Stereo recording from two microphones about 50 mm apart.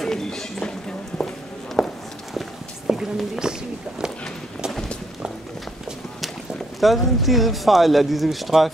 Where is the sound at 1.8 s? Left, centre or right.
Centre.